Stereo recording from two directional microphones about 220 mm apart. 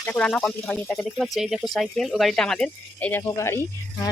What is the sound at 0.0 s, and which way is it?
Speech, 5° left (ahead or behind).